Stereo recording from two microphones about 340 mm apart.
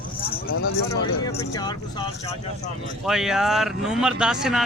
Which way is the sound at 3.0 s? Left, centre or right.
Centre.